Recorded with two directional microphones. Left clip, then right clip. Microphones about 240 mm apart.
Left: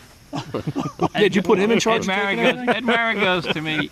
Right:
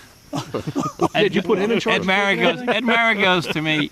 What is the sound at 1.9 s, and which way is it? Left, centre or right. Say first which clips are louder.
Speech: right 2 dB; right.